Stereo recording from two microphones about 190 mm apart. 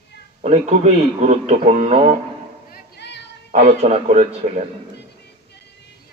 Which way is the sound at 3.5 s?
35° right (ahead or behind).